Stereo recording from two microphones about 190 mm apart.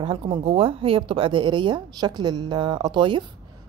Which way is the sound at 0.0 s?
25° right (ahead or behind).